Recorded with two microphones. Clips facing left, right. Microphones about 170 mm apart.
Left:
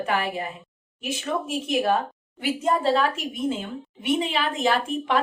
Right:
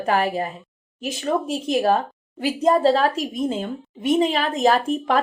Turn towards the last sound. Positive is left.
turn(degrees=-40)  # may be behind; listen again after turning